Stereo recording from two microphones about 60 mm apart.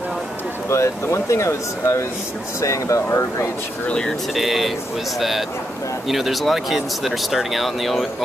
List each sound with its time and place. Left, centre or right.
0.7 s speech: left
4.4 s speech: centre
6.0 s speech: centre